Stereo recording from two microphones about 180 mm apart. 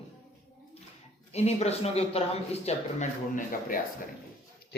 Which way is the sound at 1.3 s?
35° left (ahead or behind).